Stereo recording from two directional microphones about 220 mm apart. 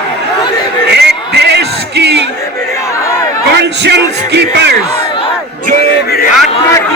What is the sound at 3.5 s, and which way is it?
Music, 50° right (ahead or behind).